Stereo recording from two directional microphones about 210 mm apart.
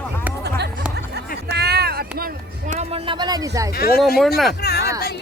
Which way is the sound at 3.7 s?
45° left (ahead or behind).